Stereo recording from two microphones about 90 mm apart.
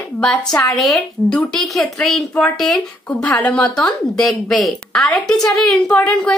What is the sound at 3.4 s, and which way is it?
Speech, 15° left (ahead or behind).